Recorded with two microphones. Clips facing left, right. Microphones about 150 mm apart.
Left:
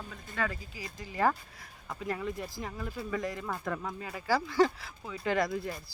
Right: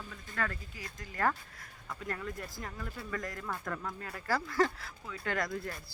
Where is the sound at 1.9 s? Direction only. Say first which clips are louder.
Left 4 dB; 20° left (ahead or behind); by 4.7 s centre (ahead or behind).